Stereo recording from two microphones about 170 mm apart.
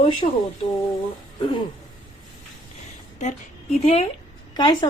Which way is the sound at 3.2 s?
45° left (ahead or behind).